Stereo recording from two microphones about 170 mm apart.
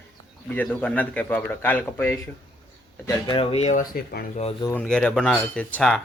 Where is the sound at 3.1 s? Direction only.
25° left (ahead or behind); by 4.3 s 60° left (ahead or behind).